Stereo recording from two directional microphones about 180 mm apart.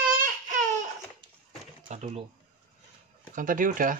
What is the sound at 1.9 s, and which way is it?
Speech, 40° right (ahead or behind).